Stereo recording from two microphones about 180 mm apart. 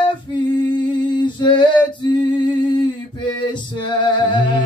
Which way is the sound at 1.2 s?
25° left (ahead or behind).